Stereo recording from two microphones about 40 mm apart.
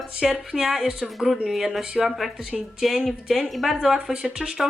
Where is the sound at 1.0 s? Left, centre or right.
Centre.